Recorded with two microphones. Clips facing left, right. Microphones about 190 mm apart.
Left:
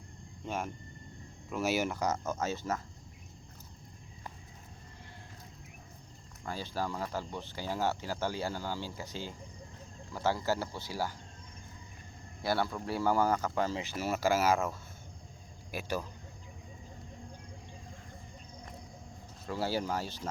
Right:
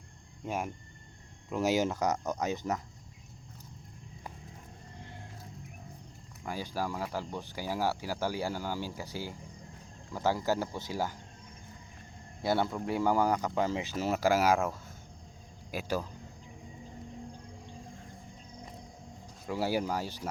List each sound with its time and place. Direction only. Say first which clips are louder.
0.4 s speech: right 2 dB; 10° right (ahead or behind)
6.4 s speech: right 1 dB; 10° right (ahead or behind)
12.4 s speech: right 2 dB; 20° right (ahead or behind)
19.5 s speech: right 2 dB; 15° right (ahead or behind)